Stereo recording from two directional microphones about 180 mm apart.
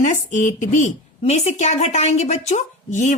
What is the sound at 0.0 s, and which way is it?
A woman's voice, 45° left (ahead or behind).